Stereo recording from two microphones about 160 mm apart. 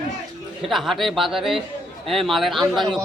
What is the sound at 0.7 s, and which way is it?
A man's voice, centre (ahead or behind).